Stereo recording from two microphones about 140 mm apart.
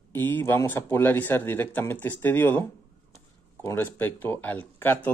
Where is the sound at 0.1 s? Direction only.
15° left (ahead or behind).